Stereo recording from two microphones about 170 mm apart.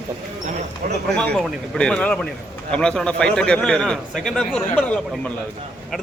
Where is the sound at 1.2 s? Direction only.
5° left (ahead or behind).